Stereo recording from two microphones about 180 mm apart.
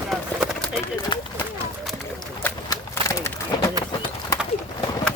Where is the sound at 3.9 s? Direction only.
25° left (ahead or behind).